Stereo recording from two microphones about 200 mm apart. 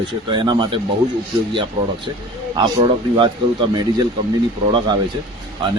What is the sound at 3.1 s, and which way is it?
Speech, 25° right (ahead or behind).